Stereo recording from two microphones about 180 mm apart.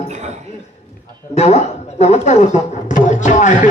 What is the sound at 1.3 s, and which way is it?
A man's voice, 40° left (ahead or behind).